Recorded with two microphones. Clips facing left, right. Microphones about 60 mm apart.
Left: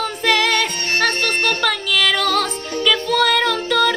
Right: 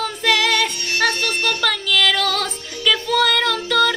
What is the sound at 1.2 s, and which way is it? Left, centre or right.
Music, left.